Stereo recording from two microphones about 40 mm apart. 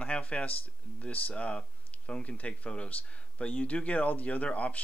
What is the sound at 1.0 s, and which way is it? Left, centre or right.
Speech, left.